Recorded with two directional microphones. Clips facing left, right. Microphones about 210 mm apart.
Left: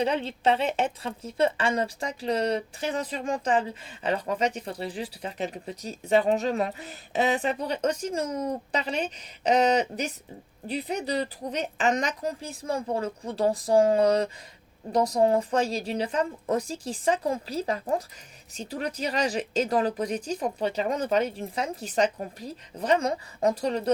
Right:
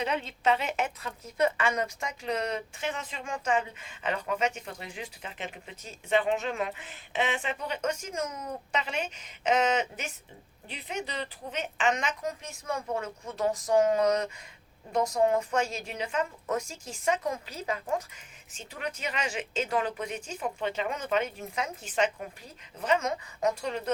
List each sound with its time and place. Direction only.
0.0 s a woman's voice: 30° left (ahead or behind)